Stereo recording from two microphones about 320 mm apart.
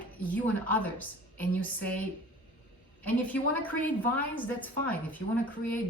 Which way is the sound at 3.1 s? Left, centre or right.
Centre.